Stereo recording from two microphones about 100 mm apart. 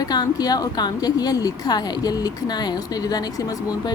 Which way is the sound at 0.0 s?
40° left (ahead or behind).